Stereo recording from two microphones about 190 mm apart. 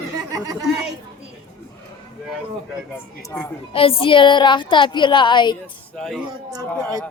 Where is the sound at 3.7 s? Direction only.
30° left (ahead or behind).